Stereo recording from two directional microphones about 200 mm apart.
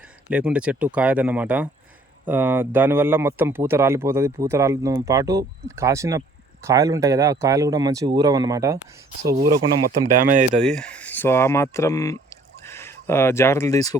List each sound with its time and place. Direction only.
0.3 s speech: 5° right (ahead or behind)
10.2 s speech: 45° right (ahead or behind)
10.6 s speech: 5° left (ahead or behind)